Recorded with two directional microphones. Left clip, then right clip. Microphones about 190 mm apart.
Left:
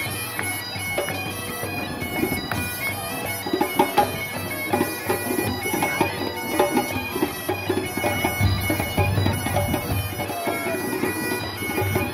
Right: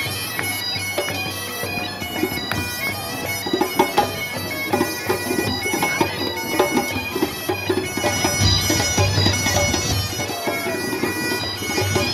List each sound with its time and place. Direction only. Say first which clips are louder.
3.5 s music: right 1 dB; 35° left (ahead or behind)
4.6 s bagpipes: right 2 dB; 40° left (ahead or behind)